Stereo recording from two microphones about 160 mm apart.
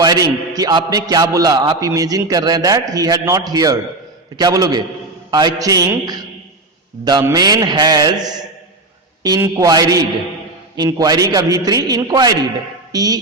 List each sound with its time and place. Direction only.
0.0 s a man's voice: 25° right (ahead or behind)